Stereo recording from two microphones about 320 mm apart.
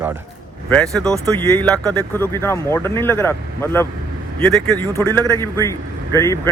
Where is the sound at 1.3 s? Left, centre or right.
Centre.